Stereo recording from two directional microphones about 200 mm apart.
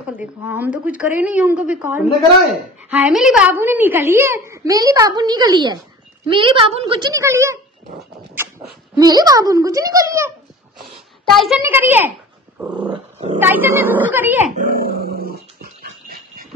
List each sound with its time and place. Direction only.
0.0 s a child's voice: 5° right (ahead or behind)
8.9 s a child's voice: 20° right (ahead or behind)
10.8 s a sound: centre (ahead or behind)
11.6 s a child's voice: 10° right (ahead or behind)
12.5 s dog: 5° right (ahead or behind)
13.4 s a child's voice: 10° right (ahead or behind)
14.5 s dog: 45° right (ahead or behind)